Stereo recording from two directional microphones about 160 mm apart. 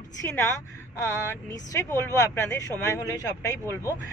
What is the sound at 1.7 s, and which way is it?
Speech, 20° left (ahead or behind).